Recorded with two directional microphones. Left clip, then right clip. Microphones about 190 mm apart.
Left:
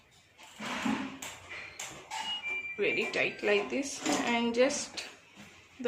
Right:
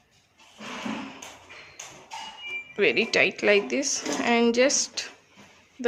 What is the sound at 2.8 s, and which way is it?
Speech, 60° right (ahead or behind).